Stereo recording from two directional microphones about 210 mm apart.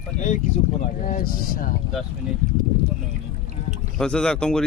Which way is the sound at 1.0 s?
40° left (ahead or behind).